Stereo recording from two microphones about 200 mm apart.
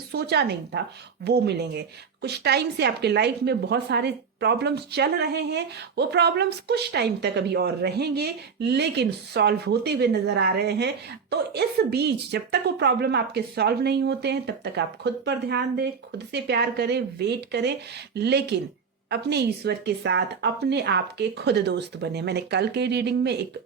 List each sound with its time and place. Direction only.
0.1 s a woman's voice: 55° right (ahead or behind)